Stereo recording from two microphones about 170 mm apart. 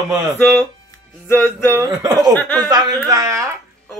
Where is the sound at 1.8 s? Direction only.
25° right (ahead or behind).